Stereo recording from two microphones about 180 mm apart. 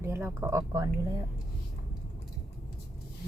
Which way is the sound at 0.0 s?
10° right (ahead or behind).